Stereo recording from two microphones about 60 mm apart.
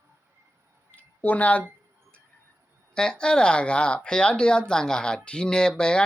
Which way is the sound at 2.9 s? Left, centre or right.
Centre.